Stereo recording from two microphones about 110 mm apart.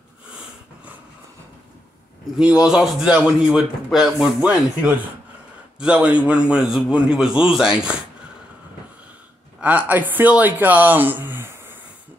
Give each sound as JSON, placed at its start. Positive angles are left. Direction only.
{"t": 2.3, "sound": "a man's voice", "side_deg": -10}
{"t": 9.6, "sound": "a man's voice", "side_deg": -15}